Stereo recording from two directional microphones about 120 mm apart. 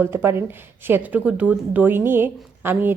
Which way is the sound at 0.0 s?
20° right (ahead or behind).